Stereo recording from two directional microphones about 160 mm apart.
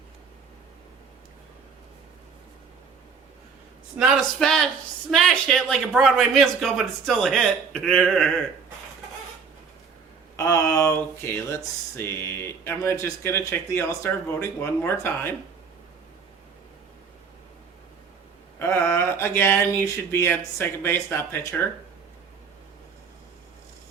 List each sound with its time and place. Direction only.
3.9 s speech: centre (ahead or behind)
10.3 s speech: 20° left (ahead or behind)
18.6 s speech: 15° left (ahead or behind)